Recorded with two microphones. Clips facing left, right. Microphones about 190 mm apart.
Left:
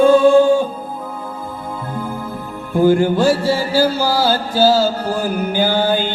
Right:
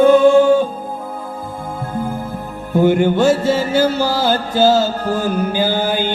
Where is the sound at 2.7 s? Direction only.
20° right (ahead or behind).